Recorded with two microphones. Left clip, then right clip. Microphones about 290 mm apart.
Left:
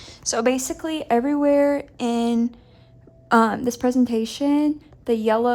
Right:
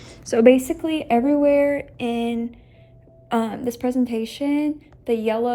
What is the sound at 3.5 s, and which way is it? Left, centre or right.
Speech, centre.